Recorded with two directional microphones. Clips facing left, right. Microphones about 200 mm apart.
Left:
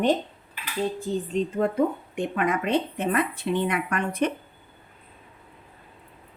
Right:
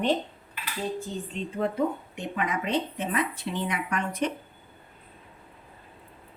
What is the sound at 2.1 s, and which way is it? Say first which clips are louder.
Speech: left 5 dB; 55° left (ahead or behind).